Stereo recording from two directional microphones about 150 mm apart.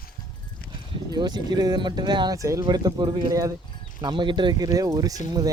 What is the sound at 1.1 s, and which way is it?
Speech, 30° right (ahead or behind).